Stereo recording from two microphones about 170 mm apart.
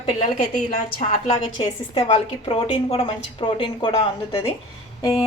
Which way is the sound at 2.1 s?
35° left (ahead or behind).